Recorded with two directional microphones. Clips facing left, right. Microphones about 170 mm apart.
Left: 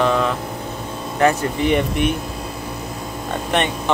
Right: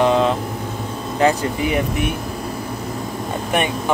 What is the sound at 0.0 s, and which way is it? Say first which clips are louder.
Vehicle: right 2 dB; 20° right (ahead or behind).